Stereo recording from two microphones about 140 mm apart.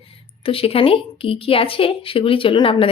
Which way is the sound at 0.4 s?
40° left (ahead or behind).